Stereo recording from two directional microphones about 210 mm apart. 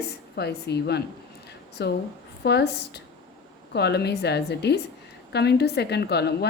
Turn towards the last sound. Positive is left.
turn(degrees=50)  # may be behind; listen again after turning